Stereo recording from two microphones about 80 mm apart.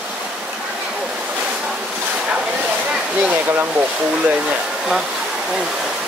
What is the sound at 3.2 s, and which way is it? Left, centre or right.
Speech, right.